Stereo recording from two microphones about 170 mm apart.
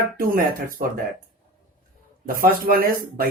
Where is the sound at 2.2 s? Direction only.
60° right (ahead or behind).